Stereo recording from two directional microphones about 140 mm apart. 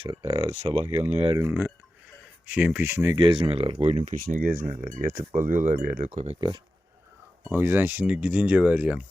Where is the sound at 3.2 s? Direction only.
40° right (ahead or behind).